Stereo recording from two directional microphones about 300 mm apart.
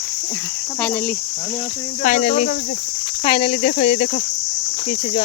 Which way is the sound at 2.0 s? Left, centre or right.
Left.